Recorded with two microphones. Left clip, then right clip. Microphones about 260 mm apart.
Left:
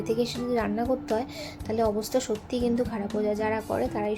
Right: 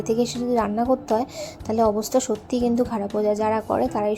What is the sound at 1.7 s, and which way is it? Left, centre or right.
A woman's voice, centre.